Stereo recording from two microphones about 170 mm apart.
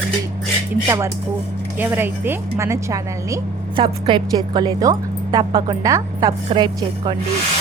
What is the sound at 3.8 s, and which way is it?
A woman's voice, 30° right (ahead or behind).